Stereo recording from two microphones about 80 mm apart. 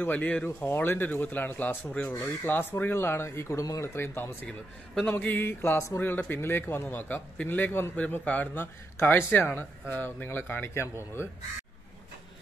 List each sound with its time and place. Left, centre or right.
0.0 s a man's voice: centre; by 3.6 s left
3.6 s speech: left
3.9 s a man's voice: left